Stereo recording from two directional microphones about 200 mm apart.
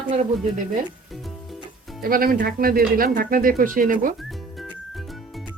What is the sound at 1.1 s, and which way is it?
Music, centre (ahead or behind).